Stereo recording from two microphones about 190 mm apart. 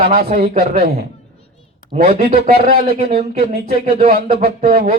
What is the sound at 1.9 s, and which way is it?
Speech, 40° right (ahead or behind).